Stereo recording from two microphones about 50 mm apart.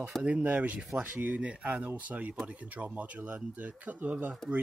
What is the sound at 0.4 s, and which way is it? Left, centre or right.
Speech, right.